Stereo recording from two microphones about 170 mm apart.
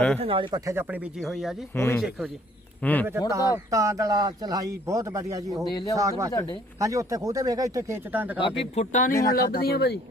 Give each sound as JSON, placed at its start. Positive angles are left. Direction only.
{"t": 0.2, "sound": "speech", "side_deg": -30}
{"t": 0.6, "sound": "speech", "side_deg": -15}
{"t": 1.2, "sound": "speech", "side_deg": 0}
{"t": 1.7, "sound": "speech", "side_deg": 15}
{"t": 3.2, "sound": "speech", "side_deg": -15}
{"t": 5.7, "sound": "speech", "side_deg": 20}
{"t": 6.0, "sound": "speech", "side_deg": -20}
{"t": 8.4, "sound": "speech", "side_deg": 30}
{"t": 9.3, "sound": "speech", "side_deg": 60}